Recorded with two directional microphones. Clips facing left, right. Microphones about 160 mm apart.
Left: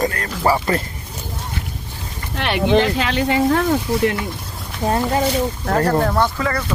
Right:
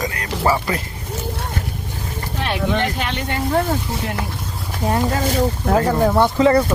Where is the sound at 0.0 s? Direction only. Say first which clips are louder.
Left 4 dB; 50° left (ahead or behind).